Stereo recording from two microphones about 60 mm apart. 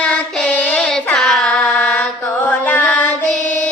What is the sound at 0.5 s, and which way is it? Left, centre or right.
Child singing, left.